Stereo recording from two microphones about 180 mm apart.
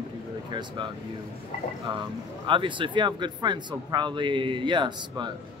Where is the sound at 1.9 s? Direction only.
25° right (ahead or behind).